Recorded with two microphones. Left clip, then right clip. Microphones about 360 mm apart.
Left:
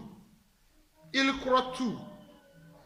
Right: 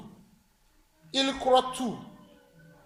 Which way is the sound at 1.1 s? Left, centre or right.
Centre.